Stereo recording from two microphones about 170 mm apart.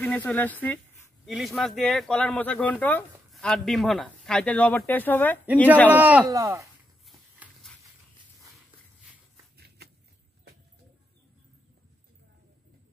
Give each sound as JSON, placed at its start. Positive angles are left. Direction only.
{"t": 0.0, "sound": "speech", "side_deg": 10}
{"t": 1.2, "sound": "speech", "side_deg": 0}
{"t": 5.9, "sound": "a man's voice", "side_deg": -10}
{"t": 7.1, "sound": "a sound", "side_deg": 0}